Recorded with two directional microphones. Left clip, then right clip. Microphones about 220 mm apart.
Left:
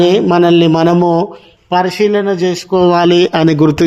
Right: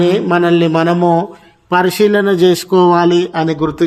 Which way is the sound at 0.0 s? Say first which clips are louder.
Left 3 dB; 25° left (ahead or behind).